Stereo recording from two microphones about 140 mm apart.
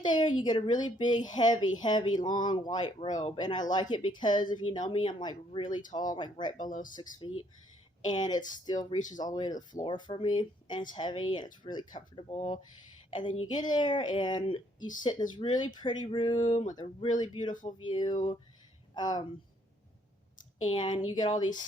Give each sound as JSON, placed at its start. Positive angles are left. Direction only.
{"t": 0.0, "sound": "speech", "side_deg": 35}
{"t": 6.7, "sound": "speech", "side_deg": 70}
{"t": 7.2, "sound": "speech", "side_deg": 40}
{"t": 12.1, "sound": "speech", "side_deg": 50}
{"t": 13.1, "sound": "speech", "side_deg": 35}
{"t": 20.7, "sound": "speech", "side_deg": 35}